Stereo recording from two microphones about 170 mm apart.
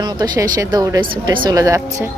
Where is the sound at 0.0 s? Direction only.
25° right (ahead or behind).